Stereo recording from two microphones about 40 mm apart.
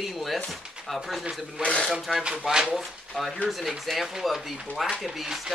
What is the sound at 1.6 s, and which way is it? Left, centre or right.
Speech, left.